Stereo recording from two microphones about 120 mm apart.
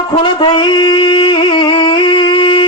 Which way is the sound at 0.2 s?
40° left (ahead or behind).